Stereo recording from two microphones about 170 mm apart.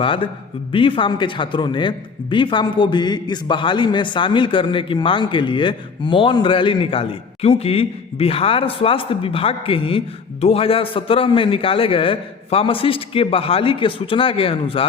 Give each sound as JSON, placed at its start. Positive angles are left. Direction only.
{"t": 0.0, "sound": "a man's voice", "side_deg": 30}